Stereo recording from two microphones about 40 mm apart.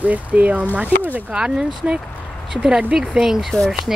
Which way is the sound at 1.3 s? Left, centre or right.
Right.